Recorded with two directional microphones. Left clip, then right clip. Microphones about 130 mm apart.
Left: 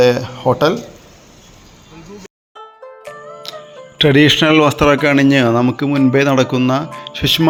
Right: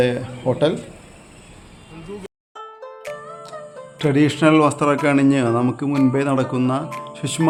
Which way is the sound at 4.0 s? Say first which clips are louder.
Left 6 dB; 30° left (ahead or behind).